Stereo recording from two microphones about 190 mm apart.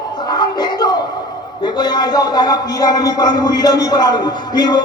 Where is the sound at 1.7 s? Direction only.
20° left (ahead or behind).